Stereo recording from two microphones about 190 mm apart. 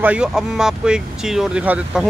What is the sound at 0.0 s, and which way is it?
Speech, 5° right (ahead or behind).